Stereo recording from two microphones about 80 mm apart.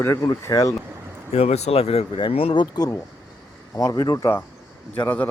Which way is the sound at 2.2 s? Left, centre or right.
Left.